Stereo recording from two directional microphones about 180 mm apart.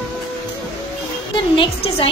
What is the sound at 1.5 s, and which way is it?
Speech, 30° left (ahead or behind).